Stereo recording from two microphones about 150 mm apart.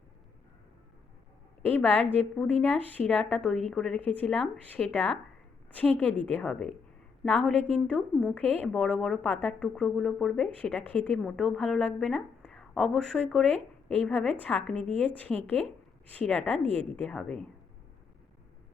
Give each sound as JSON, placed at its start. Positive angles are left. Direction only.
{"t": 1.7, "sound": "a woman's voice", "side_deg": 10}